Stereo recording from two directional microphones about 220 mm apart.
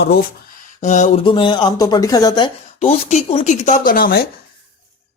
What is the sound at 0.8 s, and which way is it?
Speech, 35° left (ahead or behind).